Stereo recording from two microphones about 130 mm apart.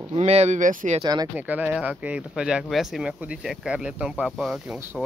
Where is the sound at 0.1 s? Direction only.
55° right (ahead or behind); by 0.9 s 85° right.